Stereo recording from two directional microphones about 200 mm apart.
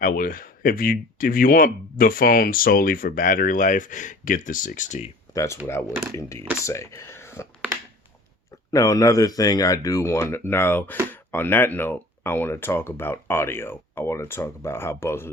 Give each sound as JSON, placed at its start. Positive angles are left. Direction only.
{"t": 0.0, "sound": "speech", "side_deg": 45}
{"t": 5.3, "sound": "speech", "side_deg": 15}
{"t": 8.7, "sound": "speech", "side_deg": 15}